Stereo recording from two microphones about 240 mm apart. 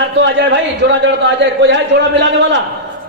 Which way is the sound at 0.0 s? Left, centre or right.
Right.